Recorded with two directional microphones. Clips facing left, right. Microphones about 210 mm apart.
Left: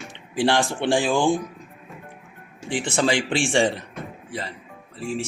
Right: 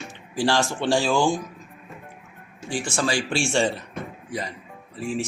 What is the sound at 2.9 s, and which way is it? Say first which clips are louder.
Speech: left 3 dB; 20° left (ahead or behind).